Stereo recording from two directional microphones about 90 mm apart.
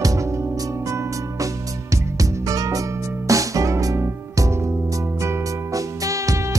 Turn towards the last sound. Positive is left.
turn(degrees=-35)  # may be behind; listen again after turning